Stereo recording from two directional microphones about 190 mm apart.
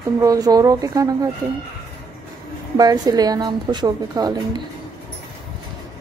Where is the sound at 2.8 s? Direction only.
20° right (ahead or behind).